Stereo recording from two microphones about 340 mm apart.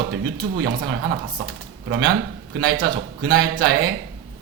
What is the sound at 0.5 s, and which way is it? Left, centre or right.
Speech, right.